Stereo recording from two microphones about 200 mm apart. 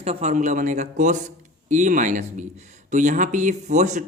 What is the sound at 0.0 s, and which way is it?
Speech, 30° right (ahead or behind).